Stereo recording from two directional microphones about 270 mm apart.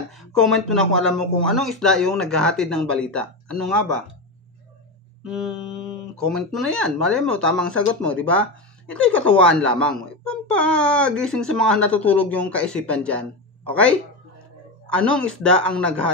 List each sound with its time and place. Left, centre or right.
0.2 s speech: centre
5.2 s speech: centre
14.9 s speech: centre